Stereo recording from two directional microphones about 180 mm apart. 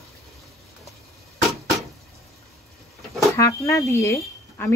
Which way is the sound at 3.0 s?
Centre (ahead or behind).